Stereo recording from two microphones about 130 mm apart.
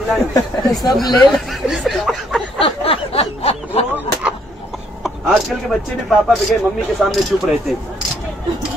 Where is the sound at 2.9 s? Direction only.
50° left (ahead or behind).